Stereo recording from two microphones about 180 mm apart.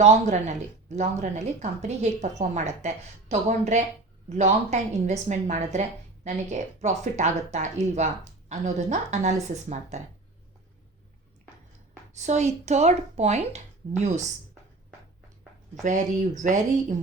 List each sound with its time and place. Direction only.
0.0 s speech: 40° right (ahead or behind)
12.1 s speech: 40° right (ahead or behind)
15.7 s speech: 45° right (ahead or behind)